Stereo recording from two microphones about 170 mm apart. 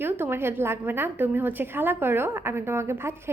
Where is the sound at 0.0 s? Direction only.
15° right (ahead or behind).